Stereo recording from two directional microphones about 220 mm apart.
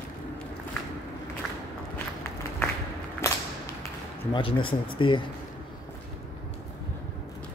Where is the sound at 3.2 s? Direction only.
10° left (ahead or behind).